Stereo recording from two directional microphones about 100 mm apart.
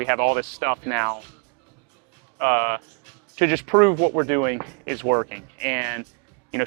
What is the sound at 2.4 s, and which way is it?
Speech, 20° right (ahead or behind).